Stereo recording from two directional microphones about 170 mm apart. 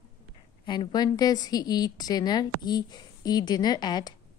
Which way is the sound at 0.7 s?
25° left (ahead or behind).